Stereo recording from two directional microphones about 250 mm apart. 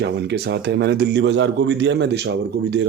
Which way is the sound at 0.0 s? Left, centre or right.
Right.